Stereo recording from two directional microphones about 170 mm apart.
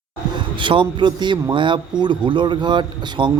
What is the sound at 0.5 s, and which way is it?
A man's voice, 30° right (ahead or behind).